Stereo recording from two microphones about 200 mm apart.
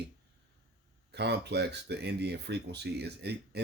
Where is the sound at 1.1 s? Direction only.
55° right (ahead or behind).